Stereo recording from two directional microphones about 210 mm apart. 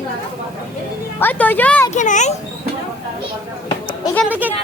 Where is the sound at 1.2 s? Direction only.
10° left (ahead or behind).